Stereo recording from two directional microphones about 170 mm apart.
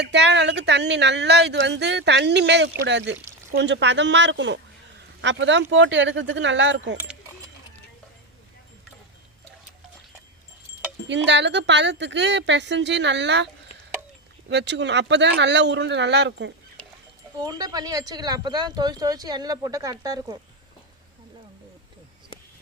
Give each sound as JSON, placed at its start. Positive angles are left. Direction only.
{"t": 0.0, "sound": "speech", "side_deg": -90}
{"t": 11.1, "sound": "speech", "side_deg": -90}
{"t": 14.5, "sound": "speech", "side_deg": -90}
{"t": 17.4, "sound": "speech", "side_deg": -20}